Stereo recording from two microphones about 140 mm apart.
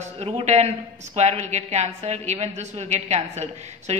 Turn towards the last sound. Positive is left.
turn(degrees=-55)  # may be behind; listen again after turning